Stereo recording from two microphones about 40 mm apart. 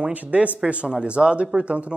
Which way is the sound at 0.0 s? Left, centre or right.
Right.